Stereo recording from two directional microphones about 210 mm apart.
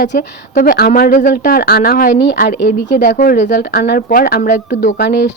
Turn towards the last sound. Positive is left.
turn(degrees=45)  # may be behind; listen again after turning